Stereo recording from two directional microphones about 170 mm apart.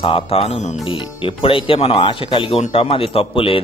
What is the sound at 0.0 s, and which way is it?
Speech, 30° left (ahead or behind).